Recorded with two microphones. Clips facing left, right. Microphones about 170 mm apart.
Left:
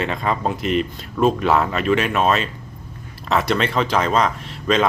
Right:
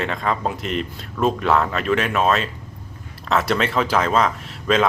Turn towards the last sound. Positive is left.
turn(degrees=0)  # may be behind; listen again after turning